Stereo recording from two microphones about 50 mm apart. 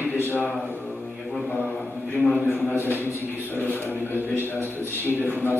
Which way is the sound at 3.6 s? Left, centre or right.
Right.